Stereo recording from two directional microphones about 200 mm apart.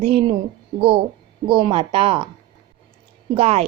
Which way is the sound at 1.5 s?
25° right (ahead or behind).